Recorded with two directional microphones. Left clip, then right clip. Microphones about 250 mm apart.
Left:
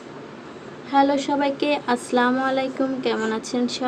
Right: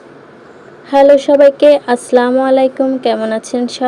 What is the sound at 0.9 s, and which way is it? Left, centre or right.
A woman's voice, right.